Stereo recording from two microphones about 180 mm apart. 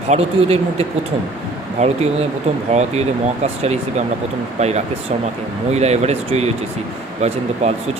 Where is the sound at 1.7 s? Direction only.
35° right (ahead or behind).